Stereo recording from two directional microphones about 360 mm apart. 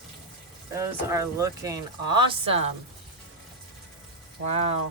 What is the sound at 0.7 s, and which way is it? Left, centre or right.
Speech, centre.